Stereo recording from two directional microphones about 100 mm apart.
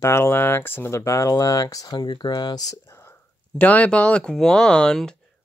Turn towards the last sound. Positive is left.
turn(degrees=5)  # may be behind; listen again after turning